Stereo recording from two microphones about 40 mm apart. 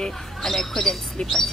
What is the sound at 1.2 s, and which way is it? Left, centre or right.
Speech, left.